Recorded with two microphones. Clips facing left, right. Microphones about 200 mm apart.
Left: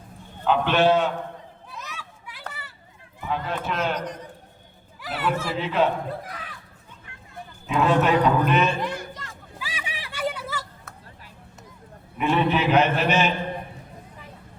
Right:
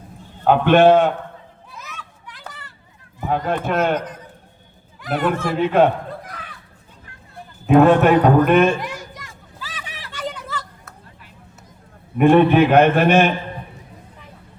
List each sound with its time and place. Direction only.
0.4 s a man's voice: 55° right (ahead or behind)
1.7 s a sound: centre (ahead or behind)
2.0 s children playing: 10° left (ahead or behind)
2.5 s a sound: 5° left (ahead or behind)
3.2 s a man's voice: 45° right (ahead or behind)
5.0 s a man's voice: 50° right (ahead or behind)
6.1 s a sound: centre (ahead or behind)
7.7 s a man's voice: 55° right (ahead or behind)
9.6 s hubbub: 10° left (ahead or behind)
12.1 s a man's voice: 55° right (ahead or behind)